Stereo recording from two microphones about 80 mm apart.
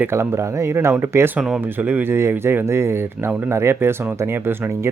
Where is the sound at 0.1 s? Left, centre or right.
Right.